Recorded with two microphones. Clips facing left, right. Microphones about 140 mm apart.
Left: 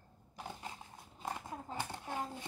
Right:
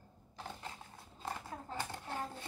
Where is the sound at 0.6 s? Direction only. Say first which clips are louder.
Left 1 dB; 15° left (ahead or behind).